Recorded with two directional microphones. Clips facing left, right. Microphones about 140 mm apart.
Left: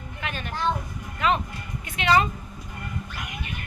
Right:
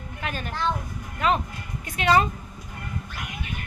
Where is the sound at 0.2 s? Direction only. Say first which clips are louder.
Right 1 dB; 40° right (ahead or behind).